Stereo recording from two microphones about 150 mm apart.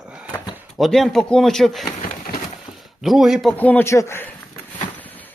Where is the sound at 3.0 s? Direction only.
Centre (ahead or behind).